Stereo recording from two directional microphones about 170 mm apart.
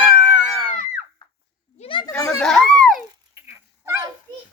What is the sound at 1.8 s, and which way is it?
Children playing, 30° left (ahead or behind).